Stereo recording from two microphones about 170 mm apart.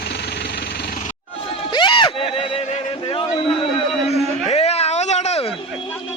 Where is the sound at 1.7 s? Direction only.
30° left (ahead or behind).